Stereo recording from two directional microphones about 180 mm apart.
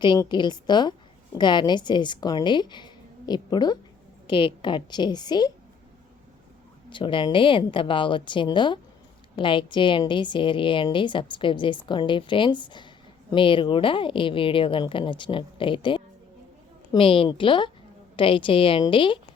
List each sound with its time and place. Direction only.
0.0 s a woman's voice: 25° left (ahead or behind)
6.9 s a woman's voice: 25° left (ahead or behind)